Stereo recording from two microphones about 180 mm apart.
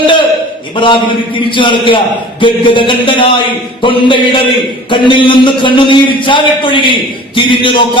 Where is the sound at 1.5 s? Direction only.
25° left (ahead or behind).